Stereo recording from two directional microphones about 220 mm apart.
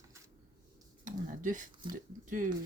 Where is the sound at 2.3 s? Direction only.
35° right (ahead or behind).